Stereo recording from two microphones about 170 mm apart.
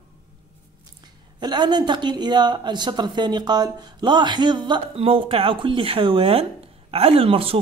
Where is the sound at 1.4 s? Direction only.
25° right (ahead or behind).